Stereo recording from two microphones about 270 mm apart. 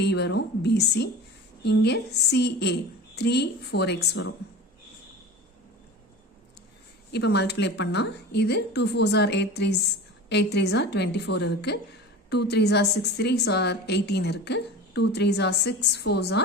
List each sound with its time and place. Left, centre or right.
0.0 s a woman's voice: left
7.1 s a woman's voice: left